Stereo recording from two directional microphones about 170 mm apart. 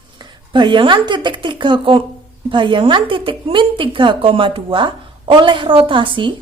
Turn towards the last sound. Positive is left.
turn(degrees=-30)  # may be behind; listen again after turning